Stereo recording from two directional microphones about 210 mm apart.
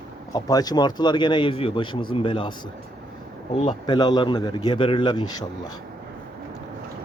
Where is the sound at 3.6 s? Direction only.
20° left (ahead or behind).